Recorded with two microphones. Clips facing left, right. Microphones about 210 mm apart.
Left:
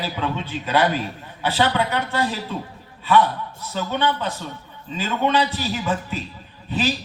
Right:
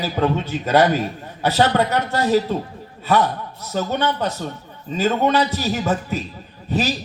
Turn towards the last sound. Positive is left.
turn(degrees=-40)  # may be behind; listen again after turning